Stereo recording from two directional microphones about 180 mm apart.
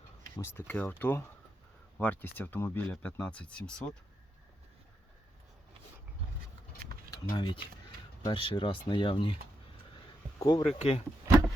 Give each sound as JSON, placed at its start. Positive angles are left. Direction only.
{"t": 0.3, "sound": "speech", "side_deg": 10}
{"t": 7.3, "sound": "speech", "side_deg": 25}
{"t": 10.4, "sound": "speech", "side_deg": 20}
{"t": 10.8, "sound": "speech", "side_deg": 35}